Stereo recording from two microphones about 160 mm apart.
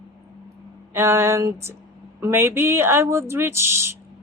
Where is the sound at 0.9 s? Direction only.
15° right (ahead or behind).